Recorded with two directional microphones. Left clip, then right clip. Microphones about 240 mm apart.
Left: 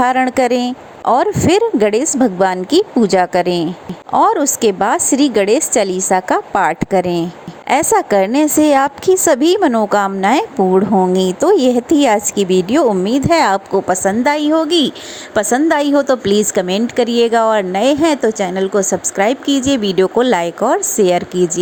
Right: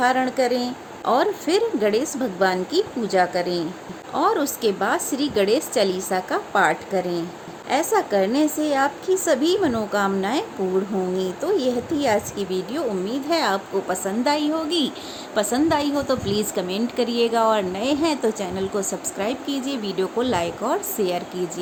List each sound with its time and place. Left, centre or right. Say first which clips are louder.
0.0 s a woman's voice: left 7 dB; left